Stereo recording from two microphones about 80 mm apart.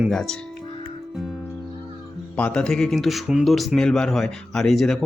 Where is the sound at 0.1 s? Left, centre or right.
Centre.